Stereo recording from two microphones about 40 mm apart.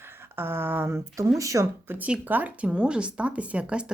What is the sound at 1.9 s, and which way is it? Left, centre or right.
Speech, right.